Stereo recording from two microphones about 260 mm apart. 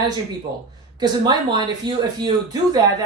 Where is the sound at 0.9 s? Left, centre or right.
Centre.